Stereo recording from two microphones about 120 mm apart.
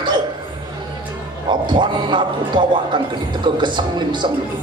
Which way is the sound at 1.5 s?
40° right (ahead or behind).